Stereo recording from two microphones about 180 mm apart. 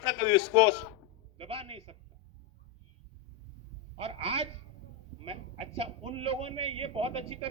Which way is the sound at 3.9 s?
30° right (ahead or behind).